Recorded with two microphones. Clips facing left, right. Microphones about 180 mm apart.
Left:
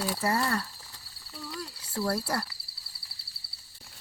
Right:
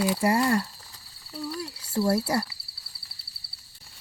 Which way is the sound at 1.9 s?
25° right (ahead or behind).